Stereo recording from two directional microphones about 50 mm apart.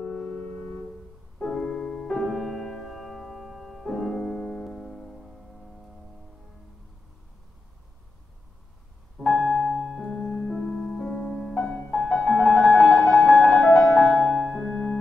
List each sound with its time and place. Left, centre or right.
0.0 s music: left
2.0 s music: centre
4.2 s piano: centre
9.3 s music: centre
10.1 s music: centre
10.8 s music: centre
12.1 s music: centre
14.1 s music: centre